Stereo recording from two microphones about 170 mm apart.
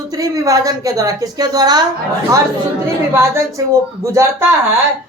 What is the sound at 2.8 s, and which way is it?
A woman's voice, 20° right (ahead or behind).